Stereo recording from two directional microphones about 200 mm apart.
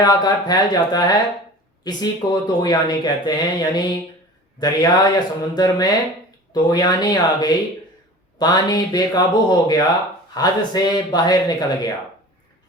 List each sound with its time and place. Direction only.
0.0 s speech: 20° left (ahead or behind)